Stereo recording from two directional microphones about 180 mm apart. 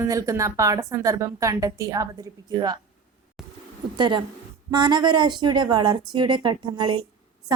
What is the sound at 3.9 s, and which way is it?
A woman's voice, 25° right (ahead or behind).